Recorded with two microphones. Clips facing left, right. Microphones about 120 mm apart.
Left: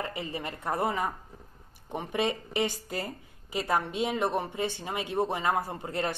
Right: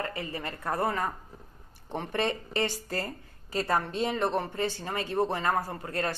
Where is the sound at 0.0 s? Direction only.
20° left (ahead or behind).